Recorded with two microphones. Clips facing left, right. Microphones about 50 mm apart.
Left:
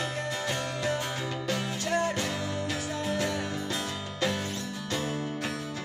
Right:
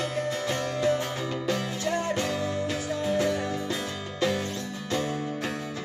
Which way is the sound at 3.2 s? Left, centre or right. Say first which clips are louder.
Right 4 dB; centre.